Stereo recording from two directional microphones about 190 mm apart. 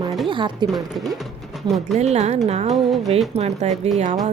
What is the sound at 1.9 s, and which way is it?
A woman's voice, 35° right (ahead or behind).